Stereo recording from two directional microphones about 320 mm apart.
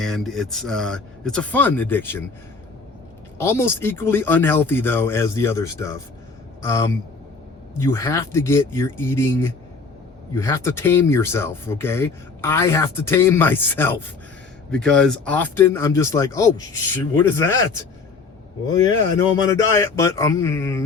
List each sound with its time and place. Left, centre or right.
0.0 s speech: centre
3.3 s speech: centre
19.5 s speech: centre